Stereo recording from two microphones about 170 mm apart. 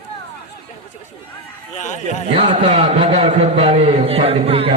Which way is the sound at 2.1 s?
35° right (ahead or behind).